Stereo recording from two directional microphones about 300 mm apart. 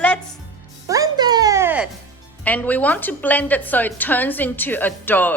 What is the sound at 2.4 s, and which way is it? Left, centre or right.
A woman's voice, centre.